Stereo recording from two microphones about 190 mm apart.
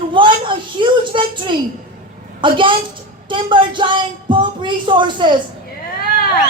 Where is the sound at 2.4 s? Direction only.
25° right (ahead or behind).